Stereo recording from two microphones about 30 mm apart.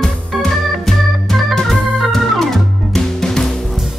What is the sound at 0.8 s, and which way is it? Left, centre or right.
Organ, centre.